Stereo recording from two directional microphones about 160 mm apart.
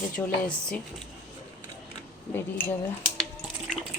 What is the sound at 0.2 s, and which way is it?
Speech, 10° left (ahead or behind).